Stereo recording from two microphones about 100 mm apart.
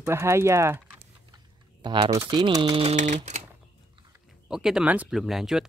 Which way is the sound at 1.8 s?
55° right (ahead or behind).